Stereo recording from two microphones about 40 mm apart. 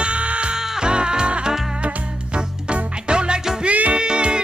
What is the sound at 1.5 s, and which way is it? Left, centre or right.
Music, centre.